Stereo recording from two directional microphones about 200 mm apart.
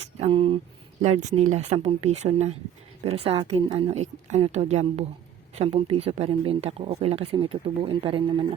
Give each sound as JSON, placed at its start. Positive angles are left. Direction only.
{"t": 0.0, "sound": "speech", "side_deg": -30}